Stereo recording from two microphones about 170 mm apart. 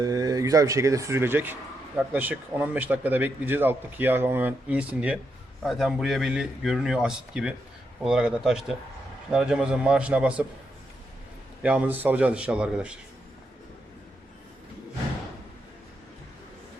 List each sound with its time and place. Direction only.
0.0 s a man's voice: 20° right (ahead or behind)
11.6 s a man's voice: 10° right (ahead or behind)